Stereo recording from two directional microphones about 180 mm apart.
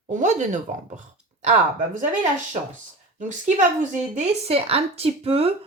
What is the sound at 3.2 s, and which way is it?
Speech, 45° right (ahead or behind).